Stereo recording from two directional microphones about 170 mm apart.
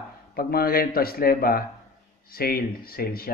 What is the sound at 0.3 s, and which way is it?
Speech, 60° left (ahead or behind).